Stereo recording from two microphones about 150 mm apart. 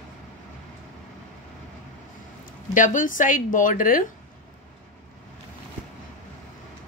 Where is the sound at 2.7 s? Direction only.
60° left (ahead or behind).